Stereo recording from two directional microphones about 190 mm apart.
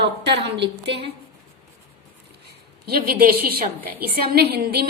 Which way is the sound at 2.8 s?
50° right (ahead or behind).